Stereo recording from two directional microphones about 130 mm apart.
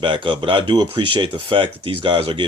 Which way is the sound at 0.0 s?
40° right (ahead or behind).